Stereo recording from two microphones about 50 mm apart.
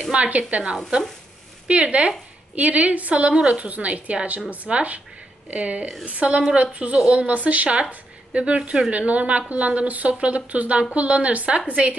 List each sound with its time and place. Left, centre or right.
0.0 s a woman's voice: right